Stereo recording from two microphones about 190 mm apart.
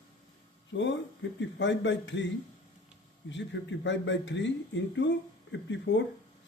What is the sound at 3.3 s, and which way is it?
Speech, 70° left (ahead or behind).